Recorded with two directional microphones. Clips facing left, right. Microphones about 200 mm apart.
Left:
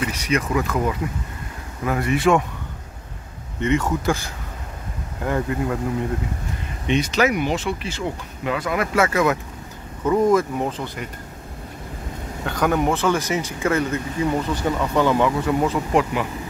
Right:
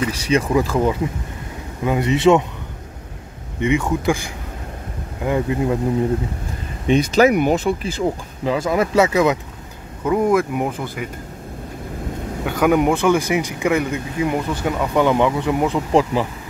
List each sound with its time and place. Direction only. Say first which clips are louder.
0.1 s speech: right 4 dB; 30° right (ahead or behind)
3.5 s speech: right 2 dB; 15° right (ahead or behind)
6.9 s speech: right 5 dB; 35° right (ahead or behind)
7.3 s speech: right 6 dB; 50° right (ahead or behind)
7.6 s speech: right 6 dB; 35° right (ahead or behind); by 11.1 s 10° right (ahead or behind)
12.4 s speech: right 4 dB; 10° right (ahead or behind)
15.9 s speech: right 3 dB; 30° right (ahead or behind)